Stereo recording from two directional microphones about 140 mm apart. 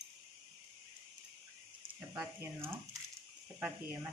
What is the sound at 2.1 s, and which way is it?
Speech, 15° right (ahead or behind).